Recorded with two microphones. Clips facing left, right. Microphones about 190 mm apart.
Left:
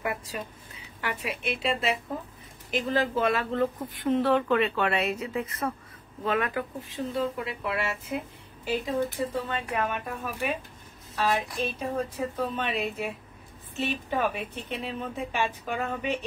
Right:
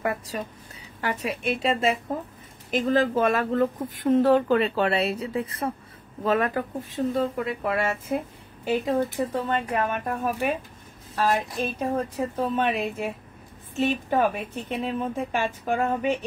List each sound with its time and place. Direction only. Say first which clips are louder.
0.0 s a woman's voice: right 4 dB; 40° right (ahead or behind)